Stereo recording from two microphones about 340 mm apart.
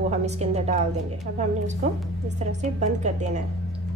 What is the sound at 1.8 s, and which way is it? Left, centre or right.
A woman's voice, centre.